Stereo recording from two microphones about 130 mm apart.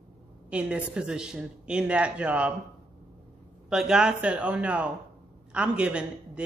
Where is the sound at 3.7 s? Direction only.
5° right (ahead or behind).